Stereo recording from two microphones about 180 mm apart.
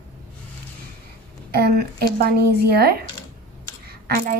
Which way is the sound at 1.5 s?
60° right (ahead or behind).